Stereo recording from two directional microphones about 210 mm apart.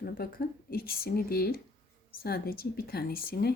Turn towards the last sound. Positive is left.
turn(degrees=45)  # may be behind; listen again after turning